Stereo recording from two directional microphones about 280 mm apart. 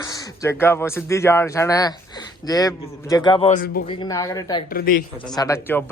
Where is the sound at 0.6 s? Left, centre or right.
Centre.